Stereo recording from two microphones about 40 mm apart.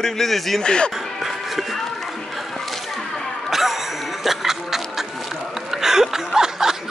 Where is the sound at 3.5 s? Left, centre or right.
Centre.